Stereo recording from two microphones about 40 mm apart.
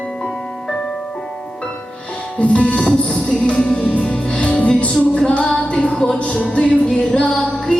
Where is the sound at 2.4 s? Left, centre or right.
Left.